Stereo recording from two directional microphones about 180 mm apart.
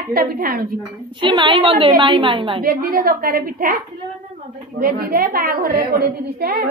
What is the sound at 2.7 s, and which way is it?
A woman's voice, 55° right (ahead or behind).